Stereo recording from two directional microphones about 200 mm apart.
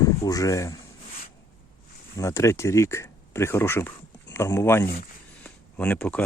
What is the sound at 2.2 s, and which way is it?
Speech, 15° left (ahead or behind).